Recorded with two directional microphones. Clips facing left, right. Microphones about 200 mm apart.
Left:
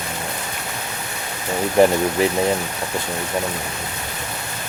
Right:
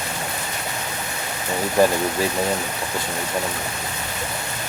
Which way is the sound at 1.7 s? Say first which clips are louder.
Left 3 dB; 20° left (ahead or behind).